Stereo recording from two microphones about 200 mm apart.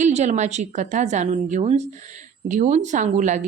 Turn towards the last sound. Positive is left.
turn(degrees=-35)  # may be behind; listen again after turning